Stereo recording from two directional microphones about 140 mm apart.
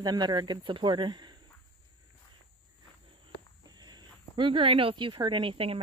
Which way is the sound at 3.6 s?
30° right (ahead or behind).